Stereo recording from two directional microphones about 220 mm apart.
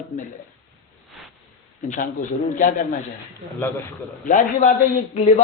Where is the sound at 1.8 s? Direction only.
35° left (ahead or behind).